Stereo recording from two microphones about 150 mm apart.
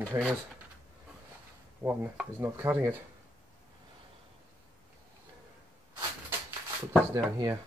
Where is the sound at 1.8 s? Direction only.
20° right (ahead or behind).